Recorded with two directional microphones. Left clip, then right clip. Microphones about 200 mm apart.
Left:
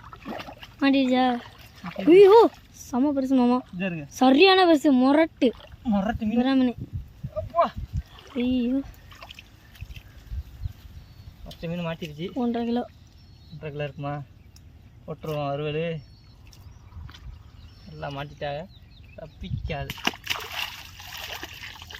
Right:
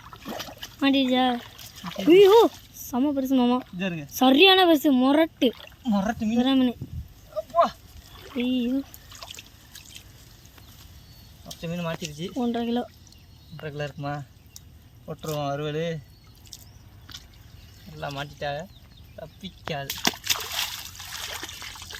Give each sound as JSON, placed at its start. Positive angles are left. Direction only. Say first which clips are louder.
{"t": 0.0, "sound": "a sound", "louder": "right 1 dB", "side_deg": 0}
{"t": 0.8, "sound": "speech", "louder": "even", "side_deg": 10}
{"t": 2.0, "sound": "speech", "louder": "left 1 dB", "side_deg": 5}
{"t": 8.4, "sound": "a sound", "louder": "left 1 dB", "side_deg": 5}
{"t": 11.4, "sound": "speech", "louder": "even", "side_deg": 10}
{"t": 18.0, "sound": "speech", "louder": "right 1 dB", "side_deg": 10}
{"t": 19.9, "sound": "splash", "louder": "right 2 dB", "side_deg": -15}
{"t": 20.2, "sound": "splash", "louder": "right 2 dB", "side_deg": 0}
{"t": 21.2, "sound": "trickle", "louder": "right 1 dB", "side_deg": 20}